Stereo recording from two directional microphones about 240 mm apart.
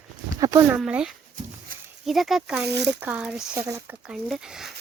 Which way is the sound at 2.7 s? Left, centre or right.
Right.